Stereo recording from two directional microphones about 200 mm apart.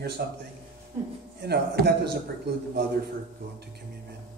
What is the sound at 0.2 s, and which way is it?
Speech, 50° right (ahead or behind).